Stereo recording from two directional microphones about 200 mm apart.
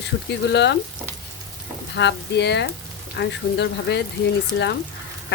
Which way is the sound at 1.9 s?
60° left (ahead or behind).